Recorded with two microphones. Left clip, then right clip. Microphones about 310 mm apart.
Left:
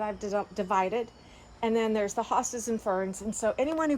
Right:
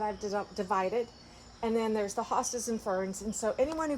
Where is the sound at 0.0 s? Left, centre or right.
Left.